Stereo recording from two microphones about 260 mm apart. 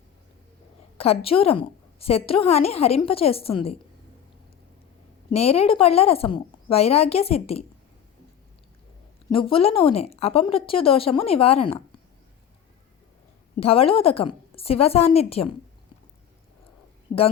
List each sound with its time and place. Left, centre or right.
0.9 s a woman's voice: left
5.3 s a woman's voice: left
9.3 s a woman's voice: left
13.6 s a woman's voice: left
17.1 s a woman's voice: left